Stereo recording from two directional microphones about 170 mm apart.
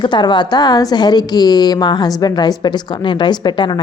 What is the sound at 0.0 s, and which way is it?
A woman's voice, 25° left (ahead or behind).